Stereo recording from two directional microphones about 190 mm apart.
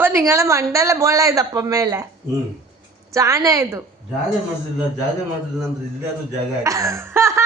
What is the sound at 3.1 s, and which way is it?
Speech, 15° right (ahead or behind).